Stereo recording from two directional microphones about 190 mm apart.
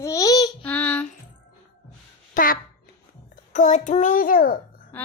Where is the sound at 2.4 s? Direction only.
40° left (ahead or behind).